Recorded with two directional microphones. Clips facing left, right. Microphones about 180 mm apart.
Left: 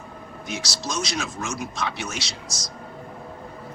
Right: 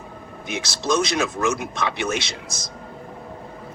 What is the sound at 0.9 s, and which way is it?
Speech, 60° right (ahead or behind).